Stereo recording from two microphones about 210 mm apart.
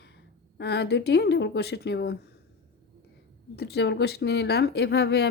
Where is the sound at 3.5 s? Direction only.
50° left (ahead or behind).